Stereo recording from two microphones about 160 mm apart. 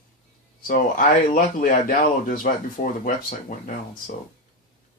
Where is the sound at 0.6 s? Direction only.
60° left (ahead or behind).